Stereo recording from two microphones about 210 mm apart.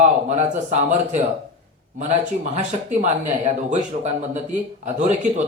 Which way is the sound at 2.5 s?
30° right (ahead or behind).